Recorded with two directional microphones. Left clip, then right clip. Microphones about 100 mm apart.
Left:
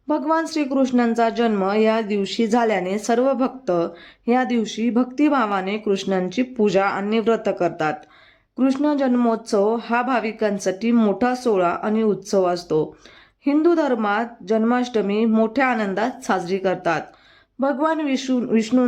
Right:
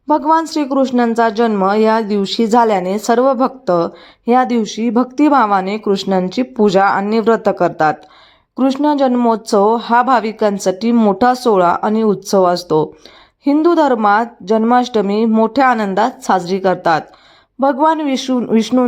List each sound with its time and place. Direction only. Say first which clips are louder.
0.1 s a man's voice: right 8 dB; 30° right (ahead or behind)